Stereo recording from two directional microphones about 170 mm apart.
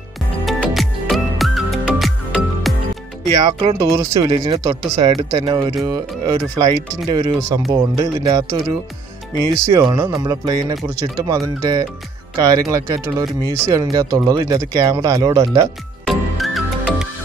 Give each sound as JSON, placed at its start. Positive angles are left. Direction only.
{"t": 0.5, "sound": "music", "side_deg": 0}
{"t": 3.3, "sound": "speech", "side_deg": -25}
{"t": 4.3, "sound": "speech", "side_deg": -30}
{"t": 9.7, "sound": "speech", "side_deg": -20}
{"t": 16.1, "sound": "music", "side_deg": 0}